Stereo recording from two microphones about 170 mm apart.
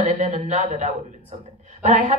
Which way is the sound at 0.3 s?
45° right (ahead or behind).